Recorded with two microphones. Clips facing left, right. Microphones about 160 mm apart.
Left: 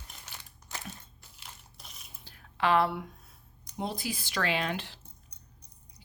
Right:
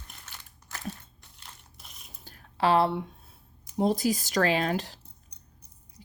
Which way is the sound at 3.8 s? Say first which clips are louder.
Right 10 dB; 40° right (ahead or behind).